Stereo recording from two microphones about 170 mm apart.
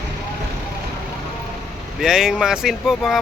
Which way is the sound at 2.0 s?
5° right (ahead or behind).